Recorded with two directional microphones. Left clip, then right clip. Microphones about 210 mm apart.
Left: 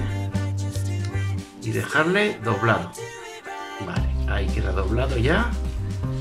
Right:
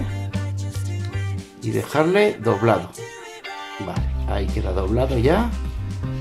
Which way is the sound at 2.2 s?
Centre (ahead or behind).